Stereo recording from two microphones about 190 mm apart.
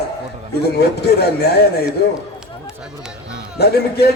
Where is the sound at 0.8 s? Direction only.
60° left (ahead or behind).